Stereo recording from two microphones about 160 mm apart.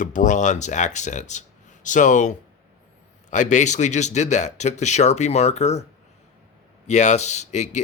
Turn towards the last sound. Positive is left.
turn(degrees=45)  # may be behind; listen again after turning